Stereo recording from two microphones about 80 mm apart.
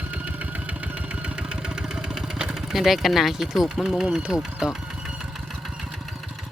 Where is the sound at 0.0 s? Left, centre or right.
Right.